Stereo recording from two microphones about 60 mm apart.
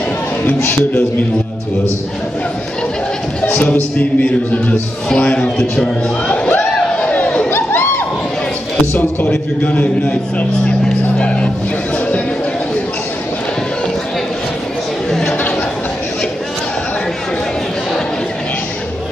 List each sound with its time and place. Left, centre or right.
0.5 s speech: left
3.5 s music: left
5.1 s speech: centre
6.3 s a sound: centre
7.4 s crowd: left
9.3 s music: centre
10.0 s speech: centre
15.0 s a sound: centre